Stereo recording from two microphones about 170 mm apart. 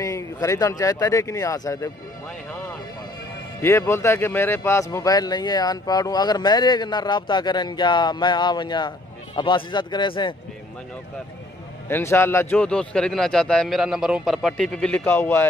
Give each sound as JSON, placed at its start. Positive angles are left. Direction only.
{"t": 0.0, "sound": "speech", "side_deg": 20}
{"t": 3.6, "sound": "speech", "side_deg": 15}
{"t": 11.9, "sound": "a man's voice", "side_deg": 15}